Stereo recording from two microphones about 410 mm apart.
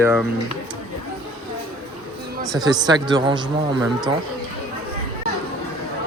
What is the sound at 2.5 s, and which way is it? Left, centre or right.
Speech, centre.